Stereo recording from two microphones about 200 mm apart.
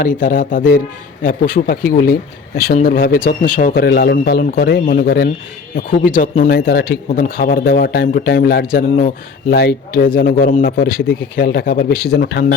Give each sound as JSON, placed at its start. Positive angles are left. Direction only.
{"t": 0.0, "sound": "speech", "side_deg": 40}